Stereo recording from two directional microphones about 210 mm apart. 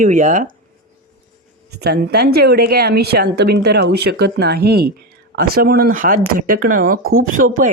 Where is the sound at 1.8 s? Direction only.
50° right (ahead or behind).